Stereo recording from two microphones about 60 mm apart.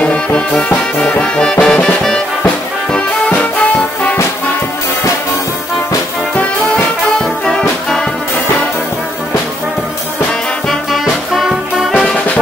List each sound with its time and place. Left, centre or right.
0.0 s music: centre
7.2 s music: centre
10.7 s music: centre